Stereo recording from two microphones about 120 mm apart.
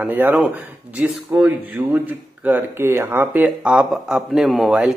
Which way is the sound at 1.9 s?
15° right (ahead or behind).